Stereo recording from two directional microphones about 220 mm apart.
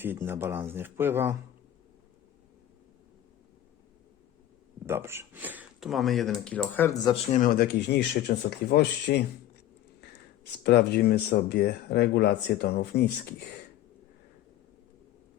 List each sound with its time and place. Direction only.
0.0 s speech: 10° right (ahead or behind)
4.9 s speech: 10° right (ahead or behind); by 6.9 s 5° left (ahead or behind)
7.3 s speech: 40° left (ahead or behind)